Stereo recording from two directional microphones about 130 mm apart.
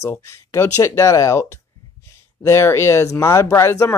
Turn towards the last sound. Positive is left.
turn(degrees=20)  # may be behind; listen again after turning